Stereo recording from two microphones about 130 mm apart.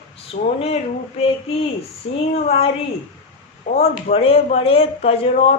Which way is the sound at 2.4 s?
50° left (ahead or behind).